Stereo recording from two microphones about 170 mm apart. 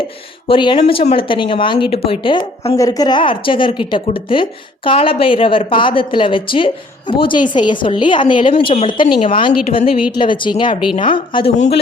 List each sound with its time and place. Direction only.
0.4 s a woman's voice: 30° left (ahead or behind)
11.5 s speech: 45° left (ahead or behind)